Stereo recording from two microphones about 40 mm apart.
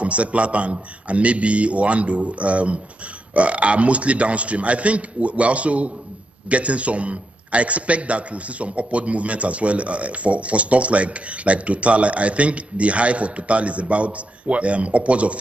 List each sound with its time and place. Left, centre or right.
0.0 s a man's voice: right